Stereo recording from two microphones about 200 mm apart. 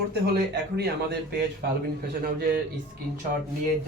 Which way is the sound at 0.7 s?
55° right (ahead or behind).